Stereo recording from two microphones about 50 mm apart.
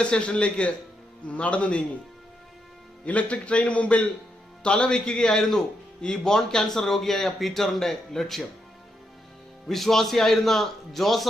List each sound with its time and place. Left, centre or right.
0.0 s a man's voice: left
3.1 s a man's voice: left; by 8.4 s centre
9.6 s a man's voice: centre